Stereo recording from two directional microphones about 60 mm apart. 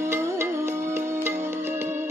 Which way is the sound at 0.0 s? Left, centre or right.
Right.